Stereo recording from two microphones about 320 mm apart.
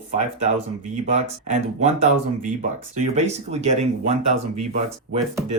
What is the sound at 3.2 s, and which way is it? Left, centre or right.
Speech, right.